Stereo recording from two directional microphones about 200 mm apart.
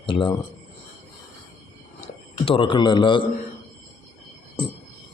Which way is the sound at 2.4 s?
25° left (ahead or behind).